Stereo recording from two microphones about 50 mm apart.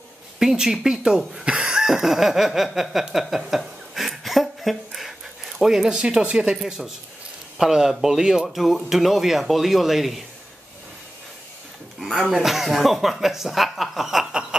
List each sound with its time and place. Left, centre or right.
0.4 s speech: centre
8.5 s speech: centre
12.0 s speech: centre
14.5 s a sound: centre